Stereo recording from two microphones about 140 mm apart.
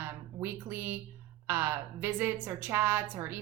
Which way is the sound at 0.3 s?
15° right (ahead or behind).